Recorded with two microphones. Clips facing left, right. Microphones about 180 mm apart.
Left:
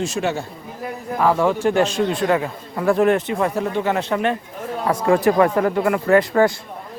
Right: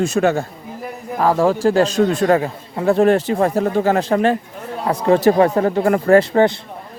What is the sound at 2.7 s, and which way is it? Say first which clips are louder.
A man's voice: right 2 dB; 25° right (ahead or behind).